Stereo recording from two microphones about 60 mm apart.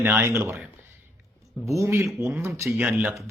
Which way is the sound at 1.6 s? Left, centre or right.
Right.